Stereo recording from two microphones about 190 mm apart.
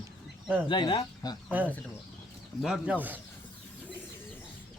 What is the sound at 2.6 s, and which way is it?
Speech, 5° right (ahead or behind).